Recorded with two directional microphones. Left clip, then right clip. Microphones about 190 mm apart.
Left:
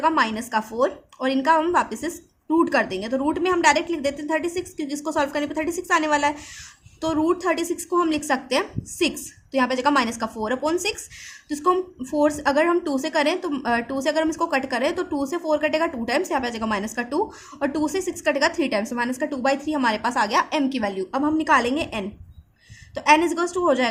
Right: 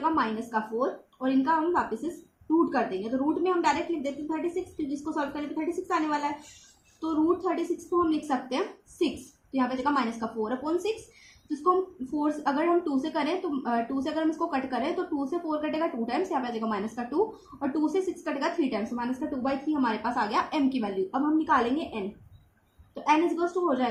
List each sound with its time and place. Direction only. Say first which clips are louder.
0.0 s a woman's voice: left 6 dB; 40° left (ahead or behind)
23.0 s a woman's voice: left 7 dB; 40° left (ahead or behind)